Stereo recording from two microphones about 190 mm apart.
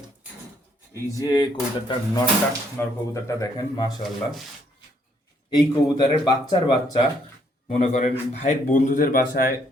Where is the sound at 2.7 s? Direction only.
15° left (ahead or behind).